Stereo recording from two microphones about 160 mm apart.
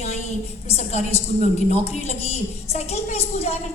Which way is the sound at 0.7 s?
40° left (ahead or behind).